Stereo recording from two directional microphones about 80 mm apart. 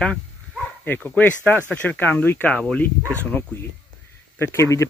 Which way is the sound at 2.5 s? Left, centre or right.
Centre.